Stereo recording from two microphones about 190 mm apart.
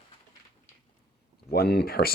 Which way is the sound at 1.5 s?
55° left (ahead or behind).